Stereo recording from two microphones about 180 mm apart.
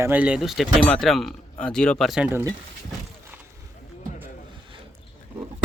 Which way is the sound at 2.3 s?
10° right (ahead or behind).